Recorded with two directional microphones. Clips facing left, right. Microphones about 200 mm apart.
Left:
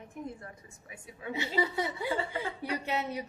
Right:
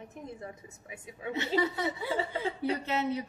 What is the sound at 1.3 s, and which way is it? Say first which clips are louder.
A woman's voice: right 2 dB; 10° left (ahead or behind).